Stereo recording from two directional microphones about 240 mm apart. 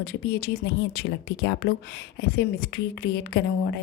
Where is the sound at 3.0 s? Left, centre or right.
Left.